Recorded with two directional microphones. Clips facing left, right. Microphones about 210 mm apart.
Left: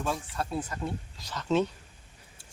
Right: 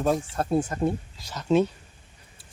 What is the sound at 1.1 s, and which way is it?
Speech, 10° right (ahead or behind).